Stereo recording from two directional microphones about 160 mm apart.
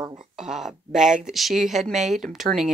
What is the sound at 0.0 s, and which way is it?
Speech, 30° right (ahead or behind).